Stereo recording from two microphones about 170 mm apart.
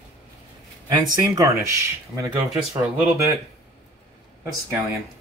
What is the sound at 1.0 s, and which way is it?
Speech, 20° right (ahead or behind).